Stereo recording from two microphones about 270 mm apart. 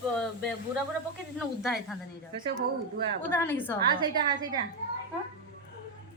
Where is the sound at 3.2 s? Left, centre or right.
Centre.